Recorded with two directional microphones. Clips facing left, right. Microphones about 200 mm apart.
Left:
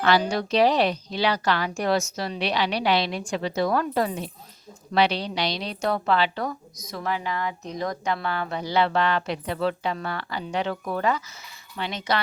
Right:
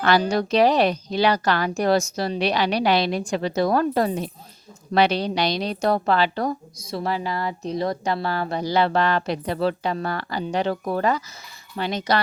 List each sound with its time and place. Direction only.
0.0 s a woman's voice: 45° right (ahead or behind)